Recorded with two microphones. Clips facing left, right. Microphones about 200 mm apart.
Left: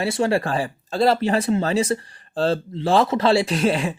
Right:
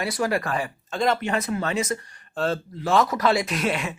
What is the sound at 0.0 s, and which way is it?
Speech, 30° left (ahead or behind).